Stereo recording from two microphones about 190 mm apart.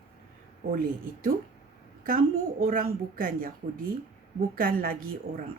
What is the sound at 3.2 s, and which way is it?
A woman's voice, 50° right (ahead or behind).